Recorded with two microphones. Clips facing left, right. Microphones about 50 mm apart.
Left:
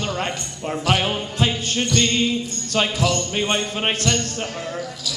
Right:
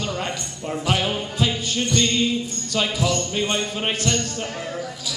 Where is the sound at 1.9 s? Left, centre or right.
Left.